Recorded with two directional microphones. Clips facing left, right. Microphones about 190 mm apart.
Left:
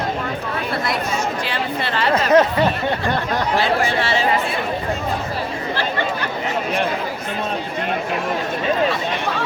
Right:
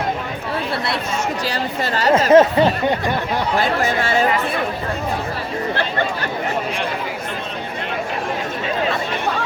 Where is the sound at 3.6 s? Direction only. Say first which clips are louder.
Even; 45° right (ahead or behind).